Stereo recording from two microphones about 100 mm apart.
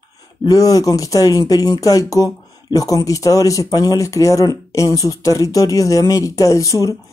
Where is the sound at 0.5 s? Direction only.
40° left (ahead or behind).